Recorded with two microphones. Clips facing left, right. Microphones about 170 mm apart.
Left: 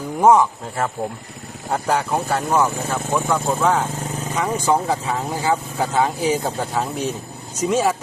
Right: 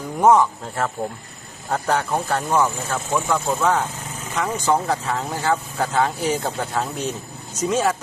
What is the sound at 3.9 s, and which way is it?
Vehicle, 40° left (ahead or behind).